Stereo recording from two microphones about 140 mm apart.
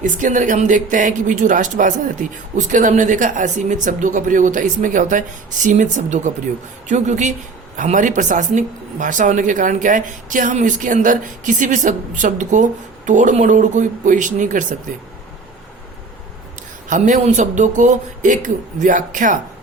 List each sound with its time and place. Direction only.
0.0 s speech: 65° right (ahead or behind)
16.9 s speech: 60° right (ahead or behind)